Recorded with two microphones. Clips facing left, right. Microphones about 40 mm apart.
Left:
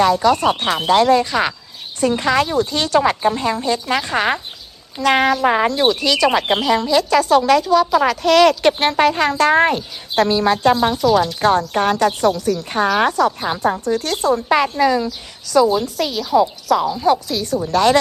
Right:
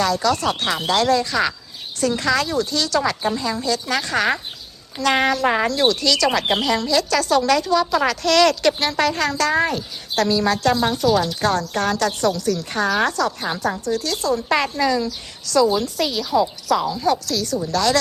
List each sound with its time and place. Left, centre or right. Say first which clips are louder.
0.0 s speech: left 5 dB; left
5.0 s speech: left 3 dB; centre
5.6 s speech: left 2 dB; centre
8.6 s speech: left 4 dB; left
9.0 s speech: left 5 dB; left
13.7 s speech: left 3 dB; left
14.5 s a woman's voice: left 4 dB; centre
16.8 s speech: left 4 dB; centre